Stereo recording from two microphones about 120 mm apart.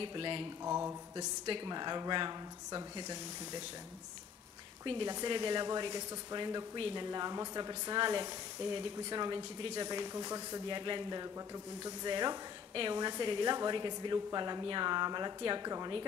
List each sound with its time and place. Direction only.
0.0 s speech: 45° right (ahead or behind)
0.7 s mantra: 20° right (ahead or behind)
1.1 s a woman's voice: 35° right (ahead or behind)
4.8 s a woman's voice: 45° right (ahead or behind)